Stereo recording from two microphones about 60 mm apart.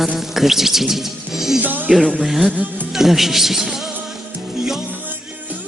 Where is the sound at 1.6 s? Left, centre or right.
Right.